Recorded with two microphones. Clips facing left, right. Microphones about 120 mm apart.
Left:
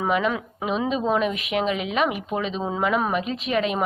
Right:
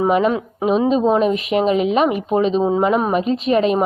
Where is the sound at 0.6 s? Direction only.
40° right (ahead or behind).